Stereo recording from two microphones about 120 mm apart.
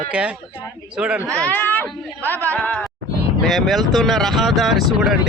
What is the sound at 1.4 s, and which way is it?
A woman's voice, 15° left (ahead or behind).